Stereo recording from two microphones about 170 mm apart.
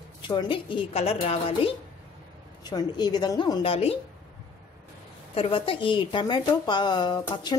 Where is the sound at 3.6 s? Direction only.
35° left (ahead or behind).